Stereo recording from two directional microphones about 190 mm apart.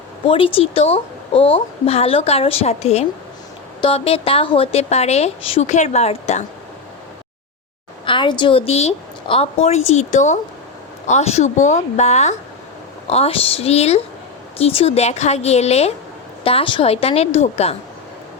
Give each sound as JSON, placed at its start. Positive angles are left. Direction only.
{"t": 0.3, "sound": "a woman's voice", "side_deg": 30}
{"t": 8.0, "sound": "a woman's voice", "side_deg": 25}